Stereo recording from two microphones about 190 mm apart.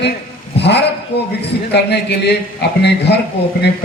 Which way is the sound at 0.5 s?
60° left (ahead or behind).